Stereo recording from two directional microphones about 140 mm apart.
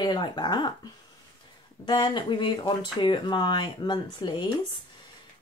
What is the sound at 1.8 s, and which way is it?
A woman's voice, 35° left (ahead or behind).